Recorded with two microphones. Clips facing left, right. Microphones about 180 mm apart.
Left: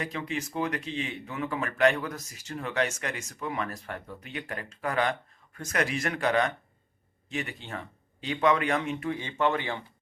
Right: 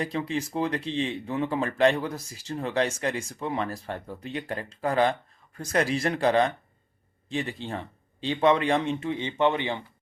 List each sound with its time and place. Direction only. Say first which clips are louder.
0.0 s speech: right 4 dB; 30° right (ahead or behind)